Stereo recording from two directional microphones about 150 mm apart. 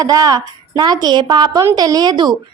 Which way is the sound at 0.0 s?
25° right (ahead or behind).